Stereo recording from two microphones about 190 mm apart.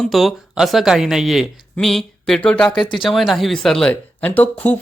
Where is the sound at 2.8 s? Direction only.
25° left (ahead or behind).